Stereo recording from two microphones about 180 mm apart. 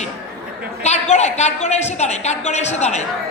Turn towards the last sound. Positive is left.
turn(degrees=40)  # may be behind; listen again after turning